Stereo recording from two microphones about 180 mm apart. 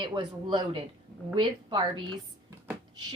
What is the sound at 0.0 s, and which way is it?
Speech, 25° right (ahead or behind).